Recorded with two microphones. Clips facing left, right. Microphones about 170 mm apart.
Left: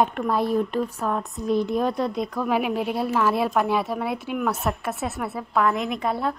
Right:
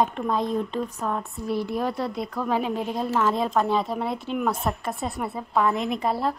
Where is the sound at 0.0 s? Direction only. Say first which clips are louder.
Left 2 dB; 10° left (ahead or behind).